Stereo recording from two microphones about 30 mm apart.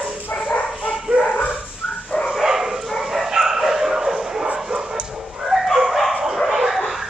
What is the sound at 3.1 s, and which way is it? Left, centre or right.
Bow-wow, centre.